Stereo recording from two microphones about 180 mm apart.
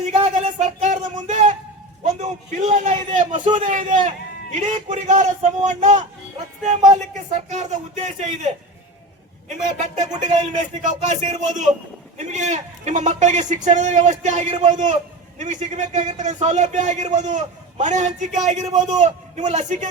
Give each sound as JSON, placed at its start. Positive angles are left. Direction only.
{"t": 0.0, "sound": "a sound", "side_deg": -40}
{"t": 2.0, "sound": "a man's voice", "side_deg": -40}
{"t": 9.7, "sound": "a man's voice", "side_deg": -40}